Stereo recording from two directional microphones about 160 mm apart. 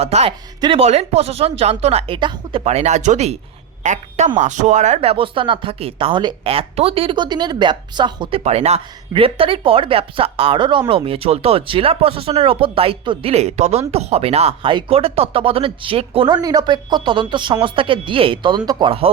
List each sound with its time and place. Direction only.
0.0 s a woman's voice: 40° right (ahead or behind)